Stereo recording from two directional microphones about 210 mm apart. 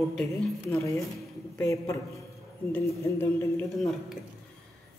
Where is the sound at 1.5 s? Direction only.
15° left (ahead or behind).